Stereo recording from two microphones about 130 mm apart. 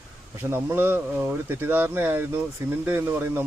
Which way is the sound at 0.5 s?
15° right (ahead or behind).